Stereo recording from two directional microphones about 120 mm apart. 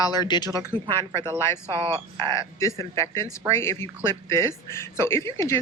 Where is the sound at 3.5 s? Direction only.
20° left (ahead or behind).